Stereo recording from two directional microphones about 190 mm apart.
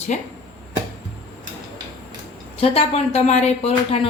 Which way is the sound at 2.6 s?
35° left (ahead or behind).